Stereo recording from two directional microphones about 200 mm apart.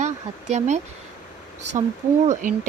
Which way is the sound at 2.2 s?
40° right (ahead or behind).